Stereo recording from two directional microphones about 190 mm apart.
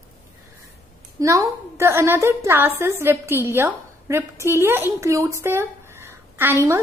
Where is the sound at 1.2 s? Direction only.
15° right (ahead or behind).